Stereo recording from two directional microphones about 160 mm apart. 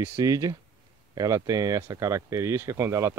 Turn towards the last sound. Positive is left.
turn(degrees=-20)  # may be behind; listen again after turning